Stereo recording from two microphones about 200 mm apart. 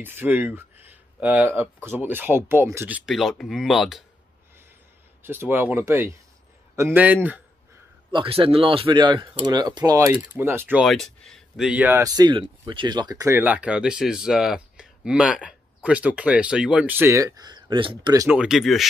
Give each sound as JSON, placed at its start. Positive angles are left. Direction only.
{"t": 0.0, "sound": "speech", "side_deg": -10}
{"t": 5.2, "sound": "speech", "side_deg": -10}
{"t": 8.1, "sound": "speech", "side_deg": -25}
{"t": 18.4, "sound": "speech", "side_deg": 0}